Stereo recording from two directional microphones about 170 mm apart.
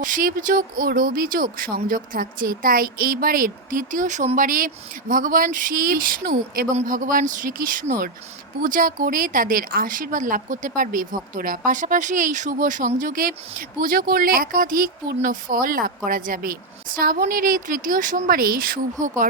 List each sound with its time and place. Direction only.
0.0 s speech: 55° right (ahead or behind)